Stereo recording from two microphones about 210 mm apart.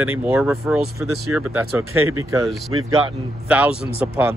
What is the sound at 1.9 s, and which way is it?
Speech, 90° right.